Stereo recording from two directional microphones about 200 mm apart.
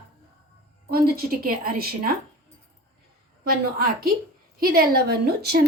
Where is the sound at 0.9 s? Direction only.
50° right (ahead or behind).